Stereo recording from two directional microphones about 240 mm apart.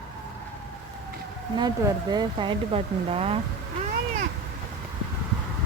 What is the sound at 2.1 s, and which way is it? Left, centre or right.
Speech, centre.